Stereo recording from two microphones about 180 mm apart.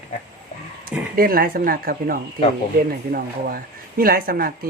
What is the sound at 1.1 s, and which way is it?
Speech, 55° right (ahead or behind).